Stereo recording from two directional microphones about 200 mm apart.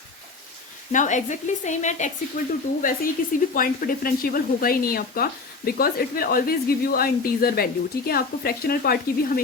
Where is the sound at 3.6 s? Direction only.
45° left (ahead or behind).